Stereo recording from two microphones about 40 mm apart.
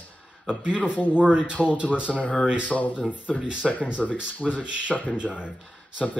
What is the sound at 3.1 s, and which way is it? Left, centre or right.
Speech, right.